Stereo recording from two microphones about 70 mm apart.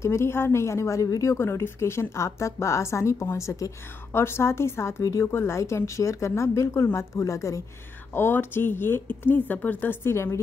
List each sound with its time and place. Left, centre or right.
0.0 s a woman's voice: left
4.1 s a woman's voice: left
8.1 s a woman's voice: left